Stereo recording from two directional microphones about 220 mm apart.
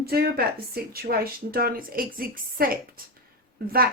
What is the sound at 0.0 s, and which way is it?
A woman's voice, 45° right (ahead or behind).